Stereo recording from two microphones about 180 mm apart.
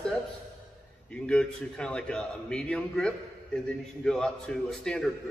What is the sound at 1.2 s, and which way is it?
A man's voice, 5° left (ahead or behind).